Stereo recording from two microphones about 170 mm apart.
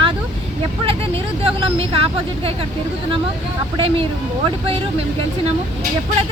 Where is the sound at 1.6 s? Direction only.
35° right (ahead or behind).